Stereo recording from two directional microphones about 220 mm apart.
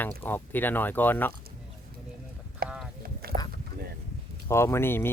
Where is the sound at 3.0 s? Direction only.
45° right (ahead or behind).